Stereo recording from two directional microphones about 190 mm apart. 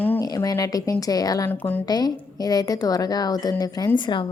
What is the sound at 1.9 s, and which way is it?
A woman's voice, 20° left (ahead or behind).